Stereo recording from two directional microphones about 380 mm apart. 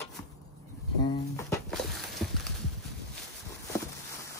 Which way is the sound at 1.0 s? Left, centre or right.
Centre.